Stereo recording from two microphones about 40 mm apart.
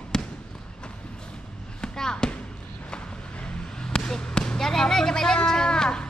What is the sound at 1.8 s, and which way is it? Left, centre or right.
Basketball bounce, centre.